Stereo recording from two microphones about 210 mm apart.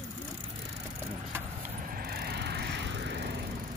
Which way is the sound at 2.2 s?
50° right (ahead or behind).